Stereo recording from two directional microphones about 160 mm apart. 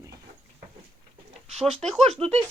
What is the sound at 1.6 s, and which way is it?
Speech, 5° right (ahead or behind).